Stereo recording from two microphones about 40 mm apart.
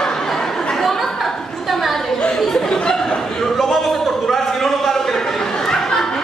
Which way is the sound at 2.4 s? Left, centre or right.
Centre.